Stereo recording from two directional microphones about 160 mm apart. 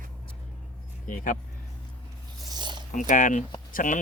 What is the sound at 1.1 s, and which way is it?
Speech, 55° left (ahead or behind).